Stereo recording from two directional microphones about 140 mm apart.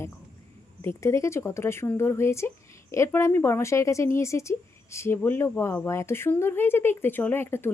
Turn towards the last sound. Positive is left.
turn(degrees=15)  # may be behind; listen again after turning